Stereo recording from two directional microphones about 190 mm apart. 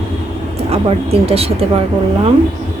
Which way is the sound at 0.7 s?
30° right (ahead or behind).